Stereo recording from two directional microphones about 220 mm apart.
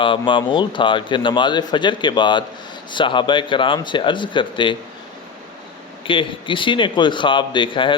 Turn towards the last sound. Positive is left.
turn(degrees=20)  # may be behind; listen again after turning